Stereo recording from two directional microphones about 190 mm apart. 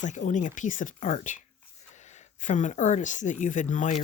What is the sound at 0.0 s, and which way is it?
Speech, 40° left (ahead or behind).